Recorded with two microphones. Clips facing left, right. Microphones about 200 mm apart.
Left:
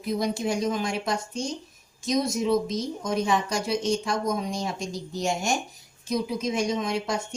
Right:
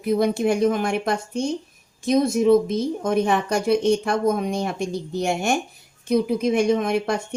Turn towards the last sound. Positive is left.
turn(degrees=-60)  # may be behind; listen again after turning